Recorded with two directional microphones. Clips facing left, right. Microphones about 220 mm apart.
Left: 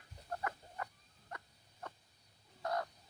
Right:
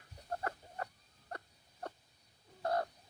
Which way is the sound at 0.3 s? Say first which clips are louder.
Right 2 dB; 40° right (ahead or behind).